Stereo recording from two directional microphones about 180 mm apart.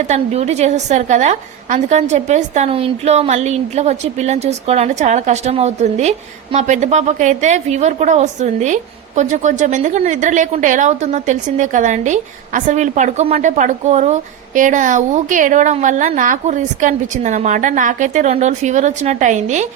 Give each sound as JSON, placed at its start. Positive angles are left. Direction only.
{"t": 0.1, "sound": "a woman's voice", "side_deg": -35}